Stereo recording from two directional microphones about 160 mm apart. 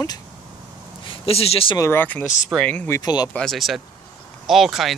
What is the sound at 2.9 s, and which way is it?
Speech, 25° left (ahead or behind).